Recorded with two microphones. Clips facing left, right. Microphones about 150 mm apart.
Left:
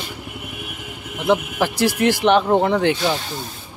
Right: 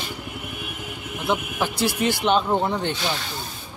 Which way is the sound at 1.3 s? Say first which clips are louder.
Left 6 dB; 85° left.